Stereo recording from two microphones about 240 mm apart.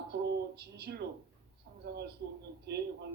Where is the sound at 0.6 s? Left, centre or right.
Right.